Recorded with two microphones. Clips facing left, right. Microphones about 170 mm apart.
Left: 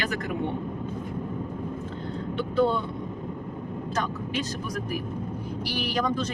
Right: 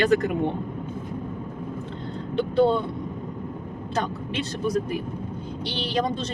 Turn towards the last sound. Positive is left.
turn(degrees=-25)  # may be behind; listen again after turning